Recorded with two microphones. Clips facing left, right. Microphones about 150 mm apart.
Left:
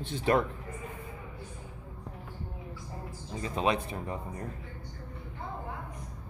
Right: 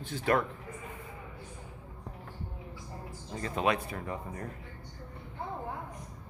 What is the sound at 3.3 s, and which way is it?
Speech, 15° left (ahead or behind).